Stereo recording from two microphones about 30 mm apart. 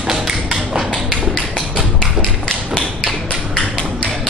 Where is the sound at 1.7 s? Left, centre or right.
Left.